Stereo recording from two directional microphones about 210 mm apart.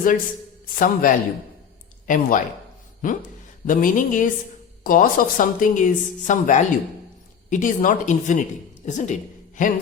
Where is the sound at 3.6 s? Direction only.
40° left (ahead or behind).